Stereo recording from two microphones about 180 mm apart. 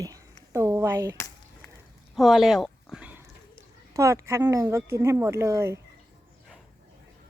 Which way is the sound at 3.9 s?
15° right (ahead or behind).